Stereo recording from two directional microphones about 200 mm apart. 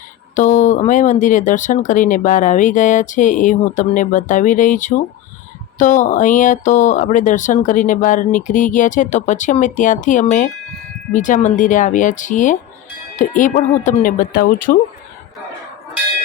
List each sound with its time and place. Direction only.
0.3 s speech: 35° left (ahead or behind)